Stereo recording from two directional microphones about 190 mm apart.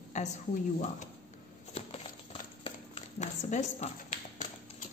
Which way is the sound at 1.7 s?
30° left (ahead or behind).